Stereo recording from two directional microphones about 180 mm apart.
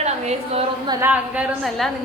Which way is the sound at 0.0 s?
35° right (ahead or behind).